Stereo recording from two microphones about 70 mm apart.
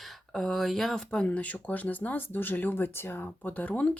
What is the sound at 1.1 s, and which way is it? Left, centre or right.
Speech, centre.